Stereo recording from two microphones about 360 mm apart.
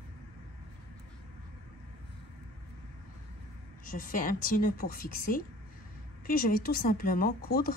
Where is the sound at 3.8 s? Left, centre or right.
Left.